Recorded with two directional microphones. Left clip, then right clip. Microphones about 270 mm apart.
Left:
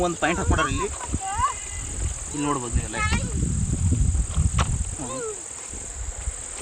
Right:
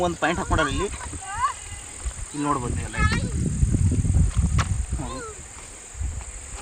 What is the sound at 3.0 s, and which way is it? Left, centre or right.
Speech, left.